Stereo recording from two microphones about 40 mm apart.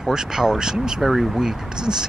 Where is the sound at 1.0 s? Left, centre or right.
Centre.